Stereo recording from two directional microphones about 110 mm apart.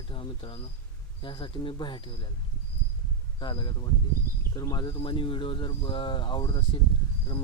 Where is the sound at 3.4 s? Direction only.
40° left (ahead or behind).